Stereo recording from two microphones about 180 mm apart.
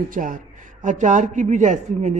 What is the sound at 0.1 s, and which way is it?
A man's voice, 50° right (ahead or behind).